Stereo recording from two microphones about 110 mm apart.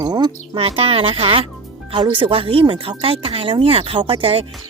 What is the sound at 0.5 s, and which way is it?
Speech, 60° right (ahead or behind).